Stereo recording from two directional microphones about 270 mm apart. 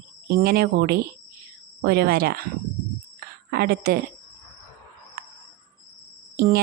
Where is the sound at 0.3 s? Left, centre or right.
Right.